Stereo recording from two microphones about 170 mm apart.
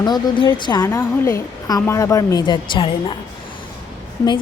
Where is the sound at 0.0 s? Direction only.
25° left (ahead or behind).